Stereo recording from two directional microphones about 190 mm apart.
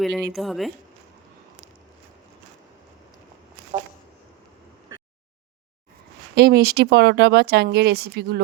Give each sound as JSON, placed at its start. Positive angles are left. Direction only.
{"t": 0.0, "sound": "speech", "side_deg": 0}
{"t": 6.3, "sound": "speech", "side_deg": -55}